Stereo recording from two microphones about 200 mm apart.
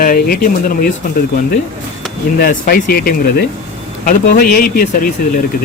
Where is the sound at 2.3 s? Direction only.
50° left (ahead or behind).